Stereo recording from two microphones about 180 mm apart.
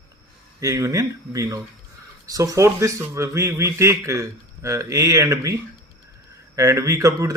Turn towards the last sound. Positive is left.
turn(degrees=-20)  # may be behind; listen again after turning